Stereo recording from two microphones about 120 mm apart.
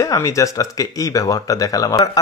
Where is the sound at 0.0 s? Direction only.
30° left (ahead or behind).